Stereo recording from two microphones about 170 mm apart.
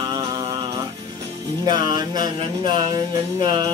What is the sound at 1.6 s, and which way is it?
Music, 25° right (ahead or behind).